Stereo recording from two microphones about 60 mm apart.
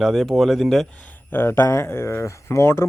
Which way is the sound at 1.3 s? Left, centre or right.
Left.